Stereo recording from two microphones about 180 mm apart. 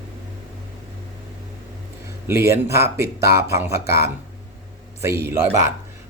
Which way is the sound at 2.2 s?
15° right (ahead or behind).